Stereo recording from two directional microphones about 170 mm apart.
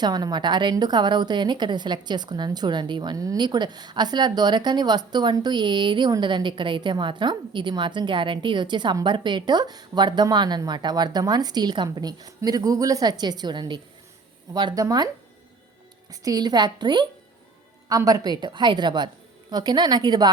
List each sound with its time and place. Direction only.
0.0 s a woman's voice: 25° right (ahead or behind)
16.2 s a woman's voice: 25° right (ahead or behind)